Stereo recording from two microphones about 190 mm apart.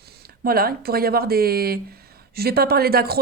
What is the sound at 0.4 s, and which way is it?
Speech, 50° right (ahead or behind).